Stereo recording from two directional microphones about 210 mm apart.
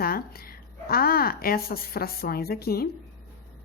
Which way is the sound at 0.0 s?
45° left (ahead or behind).